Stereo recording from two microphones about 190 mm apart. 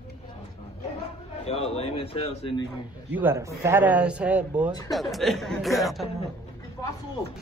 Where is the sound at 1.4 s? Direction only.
30° left (ahead or behind).